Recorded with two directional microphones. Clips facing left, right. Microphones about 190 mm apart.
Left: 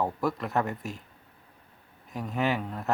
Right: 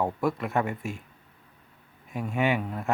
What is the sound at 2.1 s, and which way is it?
Speech, 5° right (ahead or behind).